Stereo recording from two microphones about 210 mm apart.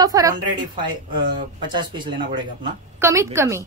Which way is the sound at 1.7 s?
20° right (ahead or behind).